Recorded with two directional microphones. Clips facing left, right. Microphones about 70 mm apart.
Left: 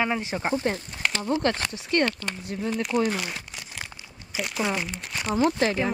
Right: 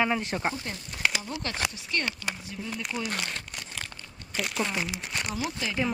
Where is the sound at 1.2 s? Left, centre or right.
Left.